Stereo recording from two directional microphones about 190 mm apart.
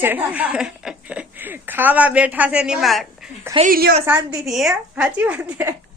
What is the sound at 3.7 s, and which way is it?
Speech, 55° right (ahead or behind).